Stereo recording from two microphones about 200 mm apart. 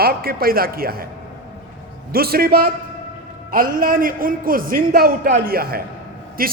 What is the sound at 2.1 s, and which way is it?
A man's voice, 50° right (ahead or behind).